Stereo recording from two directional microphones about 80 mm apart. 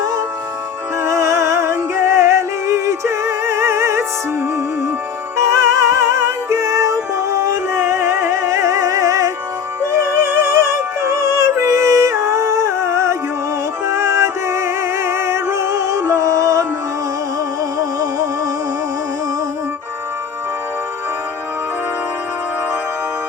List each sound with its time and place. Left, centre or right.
1.0 s music: right
5.4 s music: right
9.9 s music: right
17.7 s music: right